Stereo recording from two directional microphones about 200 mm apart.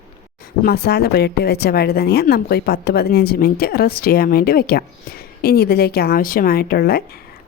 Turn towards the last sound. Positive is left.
turn(degrees=50)  # may be behind; listen again after turning